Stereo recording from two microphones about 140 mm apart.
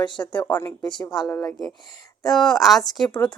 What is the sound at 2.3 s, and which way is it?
Speech, 5° left (ahead or behind).